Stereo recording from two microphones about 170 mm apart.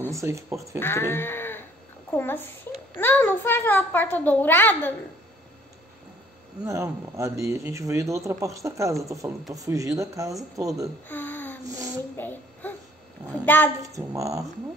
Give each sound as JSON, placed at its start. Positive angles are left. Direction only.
{"t": 0.1, "sound": "speech", "side_deg": -15}
{"t": 0.7, "sound": "sheep", "side_deg": 15}
{"t": 2.0, "sound": "a child's voice", "side_deg": 10}
{"t": 6.6, "sound": "speech", "side_deg": -15}
{"t": 11.1, "sound": "a sound", "side_deg": 10}
{"t": 12.2, "sound": "a child's voice", "side_deg": 10}
{"t": 13.8, "sound": "speech", "side_deg": -20}